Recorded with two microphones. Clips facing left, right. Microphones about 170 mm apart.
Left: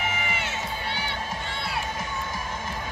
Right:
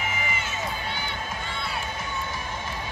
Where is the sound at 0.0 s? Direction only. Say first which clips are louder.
Left 1 dB; 70° left (ahead or behind).